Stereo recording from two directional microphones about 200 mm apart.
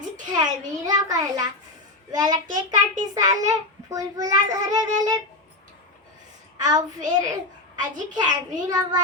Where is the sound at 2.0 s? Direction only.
20° right (ahead or behind).